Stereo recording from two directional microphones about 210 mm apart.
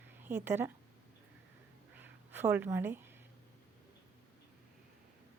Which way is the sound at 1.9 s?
10° right (ahead or behind).